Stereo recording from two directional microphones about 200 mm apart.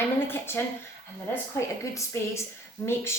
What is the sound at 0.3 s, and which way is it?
Speech, 10° left (ahead or behind).